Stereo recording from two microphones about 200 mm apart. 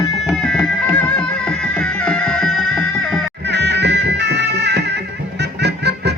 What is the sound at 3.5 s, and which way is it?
Music, 60° right (ahead or behind).